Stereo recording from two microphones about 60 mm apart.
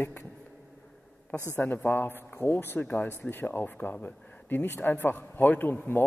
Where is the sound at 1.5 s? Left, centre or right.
Left.